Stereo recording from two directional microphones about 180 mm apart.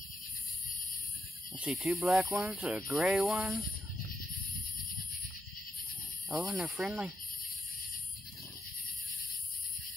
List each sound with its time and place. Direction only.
1.6 s speech: 5° right (ahead or behind)
6.3 s speech: 5° right (ahead or behind)